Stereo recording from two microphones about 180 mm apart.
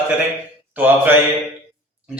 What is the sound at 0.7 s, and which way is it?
Mantra, 10° right (ahead or behind).